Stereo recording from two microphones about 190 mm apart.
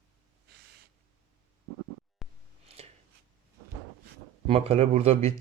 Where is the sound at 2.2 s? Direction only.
Centre (ahead or behind).